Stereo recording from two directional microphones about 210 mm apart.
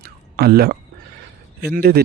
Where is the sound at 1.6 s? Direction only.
45° right (ahead or behind).